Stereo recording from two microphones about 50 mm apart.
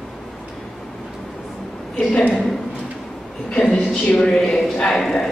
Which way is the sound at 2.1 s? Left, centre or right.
Left.